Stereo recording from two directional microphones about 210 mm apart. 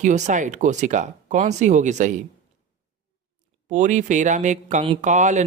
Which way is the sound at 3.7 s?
35° right (ahead or behind).